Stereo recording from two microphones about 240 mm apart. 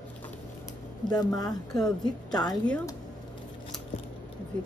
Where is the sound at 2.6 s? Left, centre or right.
Centre.